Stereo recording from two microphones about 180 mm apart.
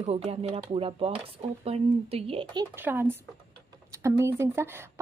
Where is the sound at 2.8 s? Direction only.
10° right (ahead or behind).